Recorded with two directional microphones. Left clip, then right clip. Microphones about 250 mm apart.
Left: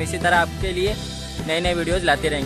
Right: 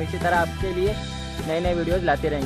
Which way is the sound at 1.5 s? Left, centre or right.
Centre.